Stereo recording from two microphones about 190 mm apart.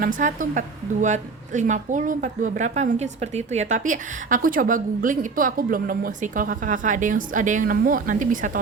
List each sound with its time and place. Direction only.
0.2 s a woman's voice: 40° right (ahead or behind)